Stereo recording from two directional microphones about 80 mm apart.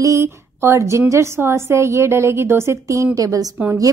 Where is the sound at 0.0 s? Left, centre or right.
Right.